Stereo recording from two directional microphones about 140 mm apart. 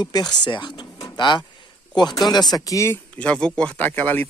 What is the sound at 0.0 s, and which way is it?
Speech, 30° left (ahead or behind).